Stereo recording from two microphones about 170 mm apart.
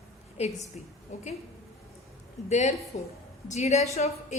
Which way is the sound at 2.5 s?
40° left (ahead or behind).